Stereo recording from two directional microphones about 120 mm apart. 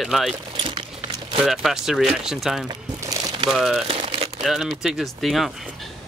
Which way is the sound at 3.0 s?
30° right (ahead or behind).